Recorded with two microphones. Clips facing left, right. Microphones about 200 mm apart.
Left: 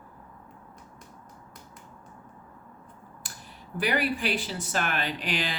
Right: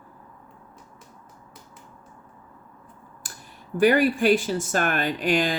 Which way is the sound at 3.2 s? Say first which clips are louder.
Right 3 dB; 45° right (ahead or behind).